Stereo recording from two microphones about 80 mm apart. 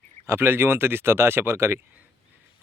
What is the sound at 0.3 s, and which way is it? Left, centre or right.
Speech, right.